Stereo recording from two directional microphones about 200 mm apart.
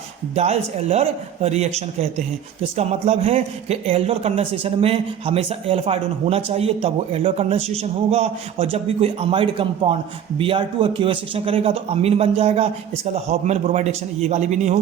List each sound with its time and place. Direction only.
0.3 s a man's voice: 30° right (ahead or behind)